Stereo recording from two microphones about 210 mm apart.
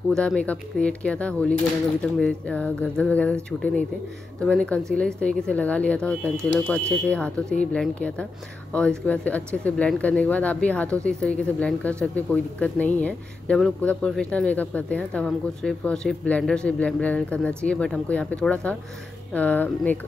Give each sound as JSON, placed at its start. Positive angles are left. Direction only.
{"t": 0.1, "sound": "speech", "side_deg": 5}